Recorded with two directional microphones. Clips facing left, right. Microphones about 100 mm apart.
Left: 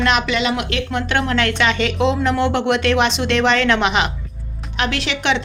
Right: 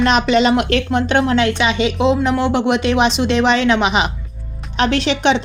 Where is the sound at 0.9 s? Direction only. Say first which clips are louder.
Right 3 dB; 25° right (ahead or behind).